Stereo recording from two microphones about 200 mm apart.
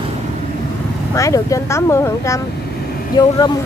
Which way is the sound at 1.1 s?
15° left (ahead or behind).